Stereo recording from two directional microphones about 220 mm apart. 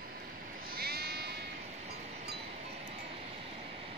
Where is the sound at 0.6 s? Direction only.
45° right (ahead or behind).